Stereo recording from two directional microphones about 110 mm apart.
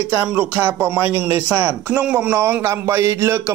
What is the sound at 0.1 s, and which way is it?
Speech, 15° right (ahead or behind).